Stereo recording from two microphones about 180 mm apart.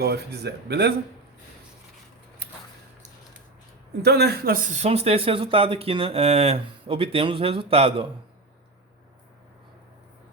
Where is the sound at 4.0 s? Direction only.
65° right (ahead or behind).